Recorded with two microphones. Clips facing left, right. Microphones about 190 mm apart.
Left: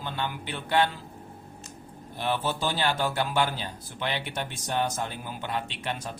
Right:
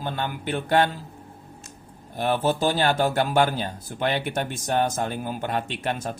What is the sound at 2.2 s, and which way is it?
Speech, 45° right (ahead or behind).